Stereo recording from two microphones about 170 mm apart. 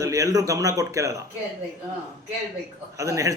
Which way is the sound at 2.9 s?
20° right (ahead or behind).